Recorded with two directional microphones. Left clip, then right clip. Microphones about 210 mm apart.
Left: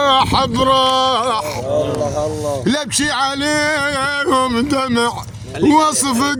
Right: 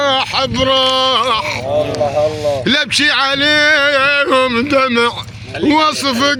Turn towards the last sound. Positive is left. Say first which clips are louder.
# right 3 dB
turn(degrees=40)  # may be behind; listen again after turning